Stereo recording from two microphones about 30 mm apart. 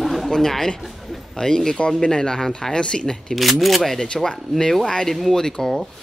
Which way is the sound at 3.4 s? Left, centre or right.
Centre.